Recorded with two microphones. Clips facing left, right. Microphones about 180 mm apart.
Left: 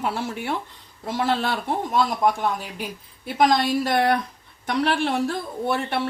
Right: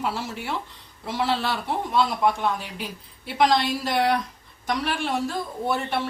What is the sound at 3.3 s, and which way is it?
A woman's voice, 50° left (ahead or behind).